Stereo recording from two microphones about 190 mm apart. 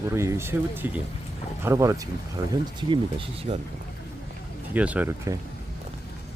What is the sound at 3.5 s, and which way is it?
Speech, 35° right (ahead or behind).